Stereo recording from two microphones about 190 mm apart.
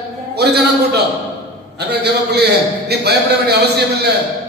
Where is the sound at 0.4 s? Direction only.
60° right (ahead or behind).